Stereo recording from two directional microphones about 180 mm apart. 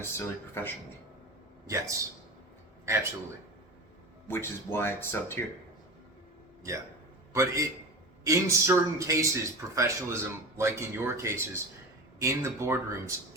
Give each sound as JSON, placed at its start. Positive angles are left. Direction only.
{"t": 0.0, "sound": "speech", "side_deg": 10}
{"t": 1.6, "sound": "speech", "side_deg": -15}
{"t": 4.3, "sound": "speech", "side_deg": 15}
{"t": 7.3, "sound": "speech", "side_deg": -15}